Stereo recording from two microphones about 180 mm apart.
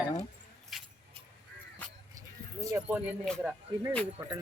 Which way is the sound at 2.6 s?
15° right (ahead or behind).